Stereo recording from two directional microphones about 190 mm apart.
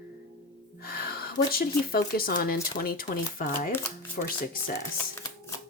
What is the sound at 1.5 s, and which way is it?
Speech, 50° left (ahead or behind).